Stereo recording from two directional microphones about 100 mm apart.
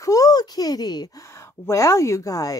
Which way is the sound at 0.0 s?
35° left (ahead or behind).